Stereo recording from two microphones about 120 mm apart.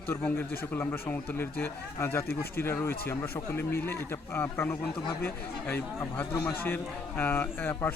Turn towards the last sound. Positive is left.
turn(degrees=15)  # may be behind; listen again after turning